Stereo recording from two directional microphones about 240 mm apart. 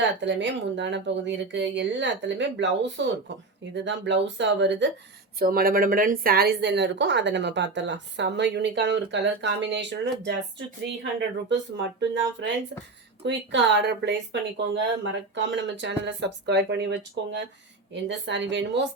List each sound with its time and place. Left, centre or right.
0.2 s speech: right
5.4 s speech: right